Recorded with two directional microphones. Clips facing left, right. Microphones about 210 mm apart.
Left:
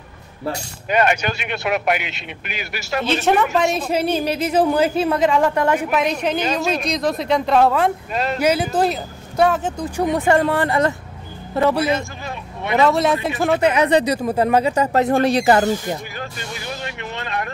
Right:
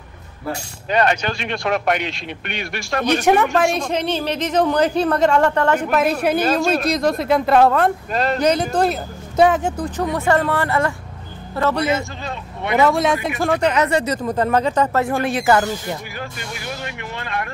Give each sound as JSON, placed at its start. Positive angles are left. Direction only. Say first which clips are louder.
{"t": 0.8, "sound": "speech", "louder": "even", "side_deg": 10}
{"t": 9.4, "sound": "speech", "louder": "right 2 dB", "side_deg": -15}
{"t": 9.8, "sound": "a man's voice", "louder": "left 4 dB", "side_deg": 15}
{"t": 12.8, "sound": "speech", "louder": "left 1 dB", "side_deg": 0}
{"t": 15.0, "sound": "speech", "louder": "left 4 dB", "side_deg": 35}
{"t": 15.4, "sound": "music", "louder": "left 2 dB", "side_deg": 25}